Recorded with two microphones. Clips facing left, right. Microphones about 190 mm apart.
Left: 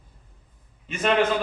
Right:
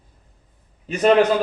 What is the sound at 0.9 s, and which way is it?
Speech, 40° right (ahead or behind).